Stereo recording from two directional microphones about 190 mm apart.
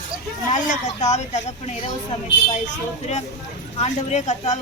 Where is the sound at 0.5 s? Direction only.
40° left (ahead or behind).